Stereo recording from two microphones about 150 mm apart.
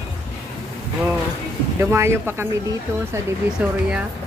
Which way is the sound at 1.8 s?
15° right (ahead or behind).